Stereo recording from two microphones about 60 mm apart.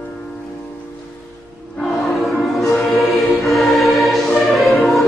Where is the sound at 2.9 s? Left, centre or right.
Centre.